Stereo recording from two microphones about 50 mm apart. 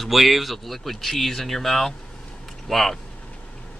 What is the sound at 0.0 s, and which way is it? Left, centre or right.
Speech, centre.